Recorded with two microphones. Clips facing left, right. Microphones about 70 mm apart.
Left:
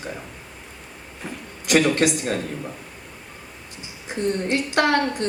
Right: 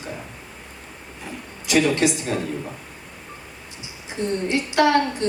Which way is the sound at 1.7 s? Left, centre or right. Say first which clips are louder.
Left 1 dB; left.